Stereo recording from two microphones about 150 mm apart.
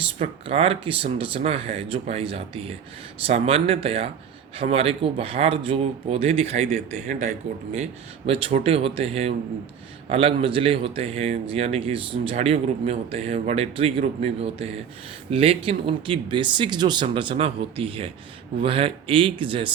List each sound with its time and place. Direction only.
0.2 s a man's voice: 40° right (ahead or behind)
8.3 s a man's voice: 40° right (ahead or behind)